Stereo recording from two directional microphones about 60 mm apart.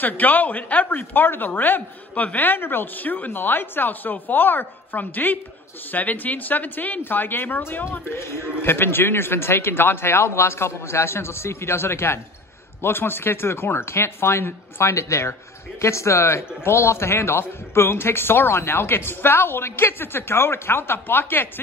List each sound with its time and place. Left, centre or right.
0.0 s a man's voice: left